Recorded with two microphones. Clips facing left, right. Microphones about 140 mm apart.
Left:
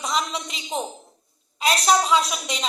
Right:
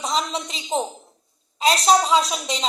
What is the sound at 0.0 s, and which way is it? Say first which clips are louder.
A woman's voice: right 2 dB; 30° right (ahead or behind).